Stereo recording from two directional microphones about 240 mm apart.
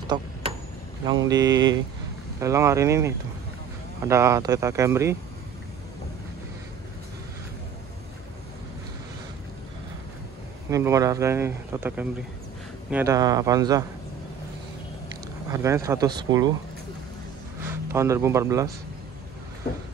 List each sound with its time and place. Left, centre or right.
0.1 s a sound: right
1.0 s speech: centre
10.7 s speech: centre
15.5 s speech: centre
17.9 s speech: centre